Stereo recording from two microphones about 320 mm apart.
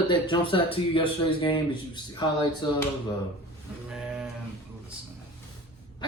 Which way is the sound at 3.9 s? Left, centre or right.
Centre.